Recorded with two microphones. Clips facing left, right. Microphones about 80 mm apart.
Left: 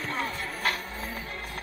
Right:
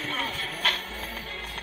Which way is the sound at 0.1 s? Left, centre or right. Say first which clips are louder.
Left 1 dB; left.